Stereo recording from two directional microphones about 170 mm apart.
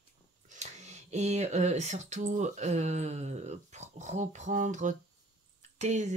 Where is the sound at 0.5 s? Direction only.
40° right (ahead or behind).